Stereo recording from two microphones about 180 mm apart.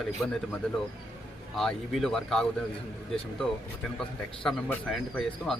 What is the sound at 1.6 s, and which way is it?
Speech, centre (ahead or behind).